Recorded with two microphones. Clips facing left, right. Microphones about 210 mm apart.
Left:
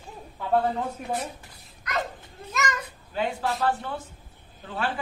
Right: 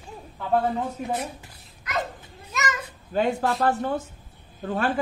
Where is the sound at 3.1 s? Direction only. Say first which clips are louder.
Right 5 dB; 45° right (ahead or behind).